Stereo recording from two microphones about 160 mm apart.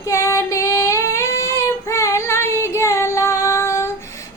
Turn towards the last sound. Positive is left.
turn(degrees=15)  # may be behind; listen again after turning